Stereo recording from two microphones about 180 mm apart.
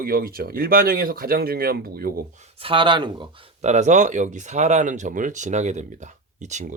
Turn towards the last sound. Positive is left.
turn(degrees=-40)  # may be behind; listen again after turning